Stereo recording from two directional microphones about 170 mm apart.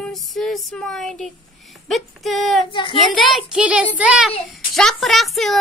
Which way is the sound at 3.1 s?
Centre (ahead or behind).